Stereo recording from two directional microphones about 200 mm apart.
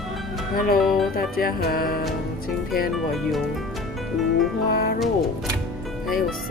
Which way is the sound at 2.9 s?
Centre (ahead or behind).